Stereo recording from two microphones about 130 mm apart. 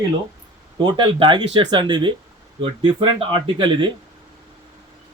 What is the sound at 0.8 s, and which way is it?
Speech, 35° right (ahead or behind).